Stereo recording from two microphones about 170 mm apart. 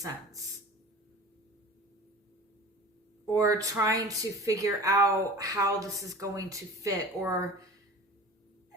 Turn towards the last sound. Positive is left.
turn(degrees=-20)  # may be behind; listen again after turning